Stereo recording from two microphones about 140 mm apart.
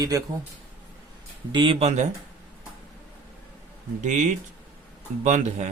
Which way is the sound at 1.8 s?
55° right (ahead or behind).